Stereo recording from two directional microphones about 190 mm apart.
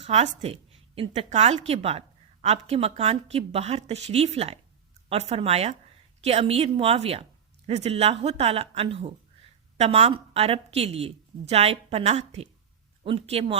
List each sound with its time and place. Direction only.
0.0 s a woman's voice: 35° right (ahead or behind)